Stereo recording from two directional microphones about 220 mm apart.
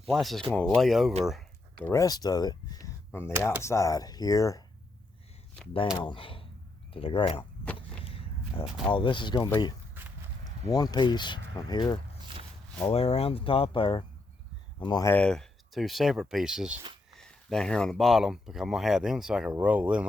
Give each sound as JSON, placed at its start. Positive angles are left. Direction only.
{"t": 0.0, "sound": "speech", "side_deg": 0}
{"t": 1.8, "sound": "speech", "side_deg": 15}
{"t": 6.0, "sound": "speech", "side_deg": 20}
{"t": 7.8, "sound": "vehicle", "side_deg": 25}
{"t": 8.9, "sound": "speech", "side_deg": 20}
{"t": 15.1, "sound": "speech", "side_deg": 5}